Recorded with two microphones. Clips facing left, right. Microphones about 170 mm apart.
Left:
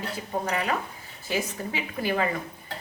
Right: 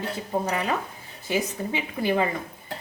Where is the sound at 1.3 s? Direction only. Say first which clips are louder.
Right 3 dB; 20° right (ahead or behind).